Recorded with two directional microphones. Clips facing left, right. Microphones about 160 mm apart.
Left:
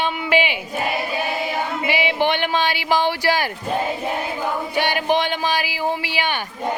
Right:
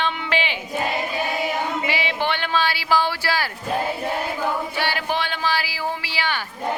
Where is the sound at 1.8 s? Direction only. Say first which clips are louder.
Left 4 dB; 15° left (ahead or behind).